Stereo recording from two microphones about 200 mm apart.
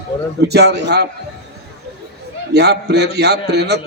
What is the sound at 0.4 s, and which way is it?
Speech, 55° right (ahead or behind).